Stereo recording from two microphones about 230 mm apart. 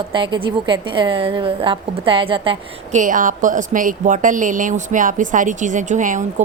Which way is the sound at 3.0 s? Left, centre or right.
Right.